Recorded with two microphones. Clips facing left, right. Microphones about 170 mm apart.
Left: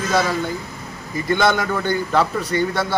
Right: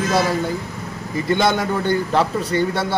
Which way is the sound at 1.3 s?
30° right (ahead or behind).